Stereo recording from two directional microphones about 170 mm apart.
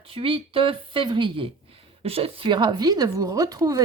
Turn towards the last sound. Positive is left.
turn(degrees=-20)  # may be behind; listen again after turning